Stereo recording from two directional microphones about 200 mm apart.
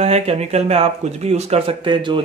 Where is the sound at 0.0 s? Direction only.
30° right (ahead or behind).